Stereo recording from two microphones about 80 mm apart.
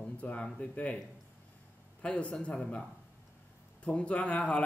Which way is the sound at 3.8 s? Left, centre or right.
Centre.